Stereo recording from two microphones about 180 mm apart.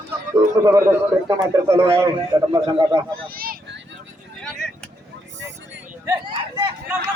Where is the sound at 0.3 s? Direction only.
20° right (ahead or behind).